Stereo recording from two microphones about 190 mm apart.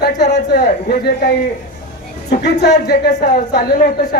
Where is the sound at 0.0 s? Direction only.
55° left (ahead or behind).